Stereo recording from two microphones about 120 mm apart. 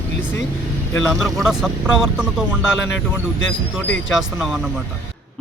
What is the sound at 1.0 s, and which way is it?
Speech, 5° right (ahead or behind).